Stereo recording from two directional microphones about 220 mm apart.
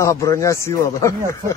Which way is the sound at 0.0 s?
15° left (ahead or behind).